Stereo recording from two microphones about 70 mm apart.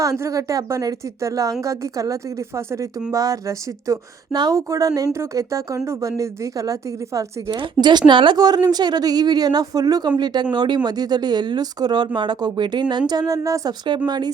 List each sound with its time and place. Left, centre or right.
0.0 s a woman's voice: right
7.8 s a woman's voice: right
10.2 s speech: right
14.1 s a woman's voice: right